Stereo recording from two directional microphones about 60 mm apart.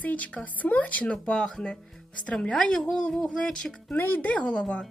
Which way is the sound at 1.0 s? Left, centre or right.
Centre.